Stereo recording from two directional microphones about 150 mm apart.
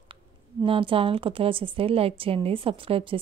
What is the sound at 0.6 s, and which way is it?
A woman's voice, 35° right (ahead or behind).